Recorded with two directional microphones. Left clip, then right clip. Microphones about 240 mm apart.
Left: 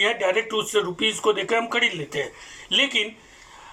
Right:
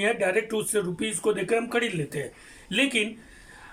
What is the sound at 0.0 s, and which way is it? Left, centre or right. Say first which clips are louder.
Speech: left 3 dB; right.